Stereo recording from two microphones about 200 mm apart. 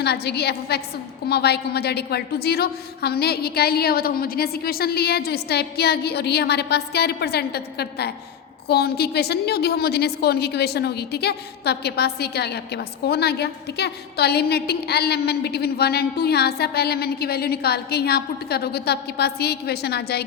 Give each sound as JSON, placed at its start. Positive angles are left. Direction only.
{"t": 0.0, "sound": "a woman's voice", "side_deg": 55}